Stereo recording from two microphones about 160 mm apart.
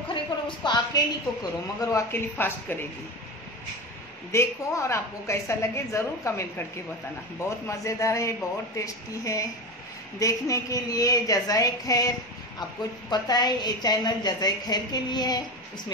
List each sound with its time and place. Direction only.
0.7 s a woman's voice: 25° left (ahead or behind)
4.3 s a woman's voice: 15° left (ahead or behind)
7.4 s a woman's voice: 20° left (ahead or behind)
13.1 s a woman's voice: 25° left (ahead or behind)